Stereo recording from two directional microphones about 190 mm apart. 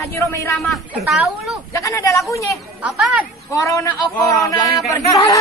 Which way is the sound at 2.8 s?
5° right (ahead or behind).